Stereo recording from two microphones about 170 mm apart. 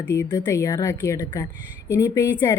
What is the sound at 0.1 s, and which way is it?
A woman's voice, 20° left (ahead or behind).